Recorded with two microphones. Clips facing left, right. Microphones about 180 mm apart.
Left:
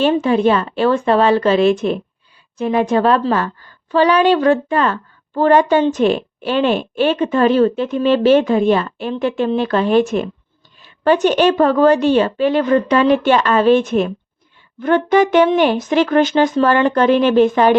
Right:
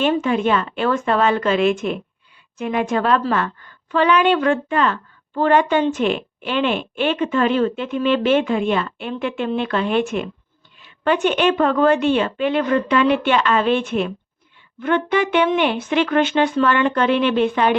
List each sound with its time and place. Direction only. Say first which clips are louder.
0.0 s a woman's voice: left 4 dB; 35° left (ahead or behind)